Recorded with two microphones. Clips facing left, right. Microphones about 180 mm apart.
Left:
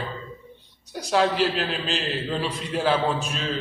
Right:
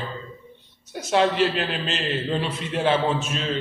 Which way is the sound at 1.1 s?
Centre (ahead or behind).